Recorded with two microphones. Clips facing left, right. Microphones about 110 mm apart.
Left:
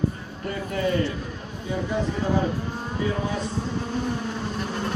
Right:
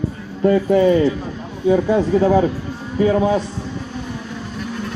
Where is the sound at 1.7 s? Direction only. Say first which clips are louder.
Right 12 dB; 85° right.